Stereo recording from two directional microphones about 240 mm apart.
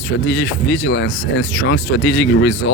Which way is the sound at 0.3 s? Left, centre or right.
Left.